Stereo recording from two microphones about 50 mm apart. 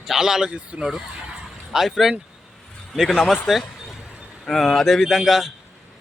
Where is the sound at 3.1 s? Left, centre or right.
Centre.